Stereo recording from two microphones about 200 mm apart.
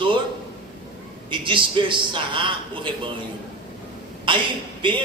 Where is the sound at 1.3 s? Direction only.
25° right (ahead or behind).